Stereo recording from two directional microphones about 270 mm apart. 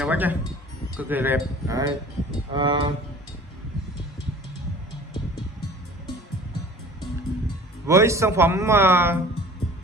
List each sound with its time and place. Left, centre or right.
0.0 s speech: centre
7.0 s music: centre
7.9 s speech: centre